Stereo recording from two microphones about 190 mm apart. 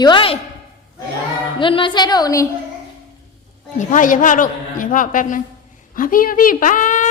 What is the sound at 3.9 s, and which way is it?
A woman's voice, 45° left (ahead or behind).